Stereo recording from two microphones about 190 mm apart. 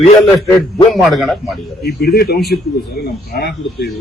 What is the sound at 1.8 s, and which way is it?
Speech, 55° left (ahead or behind).